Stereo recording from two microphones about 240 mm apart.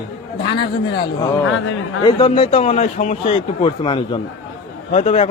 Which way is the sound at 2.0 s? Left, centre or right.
Left.